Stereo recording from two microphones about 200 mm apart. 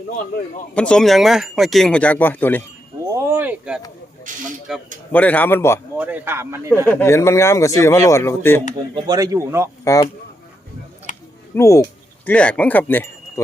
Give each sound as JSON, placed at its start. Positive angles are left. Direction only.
{"t": 0.7, "sound": "speech", "side_deg": 5}
{"t": 3.0, "sound": "a sound", "side_deg": -15}
{"t": 4.3, "sound": "speech", "side_deg": -40}
{"t": 4.7, "sound": "speech", "side_deg": 0}
{"t": 5.1, "sound": "speech", "side_deg": 10}
{"t": 6.0, "sound": "speech", "side_deg": -10}
{"t": 6.8, "sound": "speech", "side_deg": 15}
{"t": 9.0, "sound": "speech", "side_deg": -20}
{"t": 9.8, "sound": "speech", "side_deg": 15}
{"t": 11.1, "sound": "a sound", "side_deg": 40}
{"t": 11.5, "sound": "speech", "side_deg": 15}